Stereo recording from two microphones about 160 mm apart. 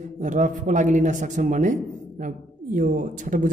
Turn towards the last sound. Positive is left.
turn(degrees=-55)  # may be behind; listen again after turning